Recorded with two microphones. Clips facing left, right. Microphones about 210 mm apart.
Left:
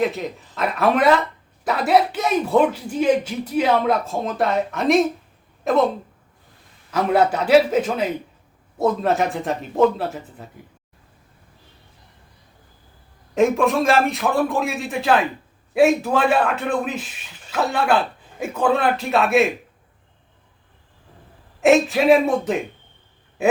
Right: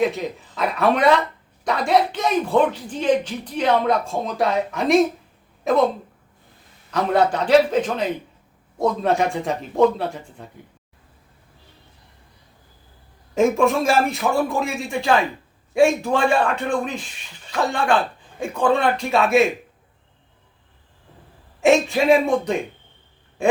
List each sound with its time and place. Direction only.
0.0 s speech: centre (ahead or behind)
6.9 s a man's voice: 5° left (ahead or behind)
13.3 s speech: centre (ahead or behind)
21.6 s speech: centre (ahead or behind)